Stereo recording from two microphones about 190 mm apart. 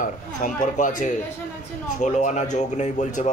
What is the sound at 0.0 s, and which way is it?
Speech, 40° left (ahead or behind).